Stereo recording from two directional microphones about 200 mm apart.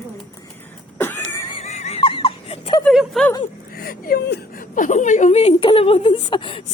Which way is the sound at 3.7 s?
50° left (ahead or behind).